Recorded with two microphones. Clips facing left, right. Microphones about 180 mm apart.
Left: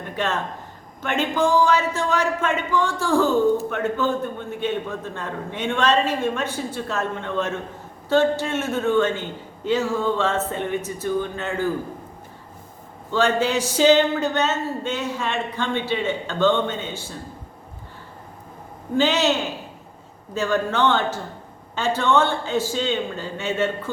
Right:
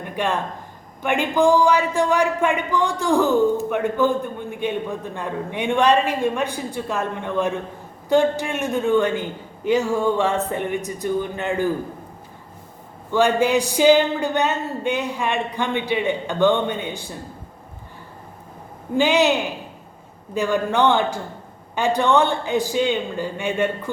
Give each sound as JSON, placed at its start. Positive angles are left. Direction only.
{"t": 0.0, "sound": "a sound", "side_deg": -10}
{"t": 1.0, "sound": "a man's voice", "side_deg": -15}
{"t": 13.1, "sound": "a man's voice", "side_deg": -15}
{"t": 18.9, "sound": "a man's voice", "side_deg": -10}